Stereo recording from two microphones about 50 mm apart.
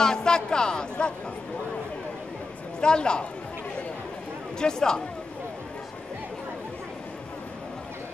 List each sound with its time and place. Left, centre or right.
0.0 s speech: centre
2.8 s a man's voice: centre
4.6 s speech: centre